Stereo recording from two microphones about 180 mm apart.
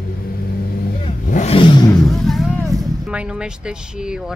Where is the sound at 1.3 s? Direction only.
45° left (ahead or behind).